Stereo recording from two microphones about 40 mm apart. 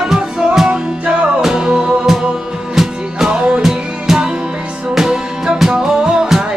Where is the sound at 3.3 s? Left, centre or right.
Right.